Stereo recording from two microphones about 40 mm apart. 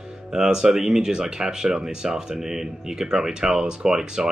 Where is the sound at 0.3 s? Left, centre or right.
Centre.